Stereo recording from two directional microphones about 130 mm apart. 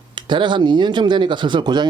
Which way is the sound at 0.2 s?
40° right (ahead or behind).